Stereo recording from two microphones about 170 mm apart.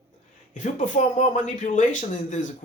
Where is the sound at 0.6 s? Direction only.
45° left (ahead or behind).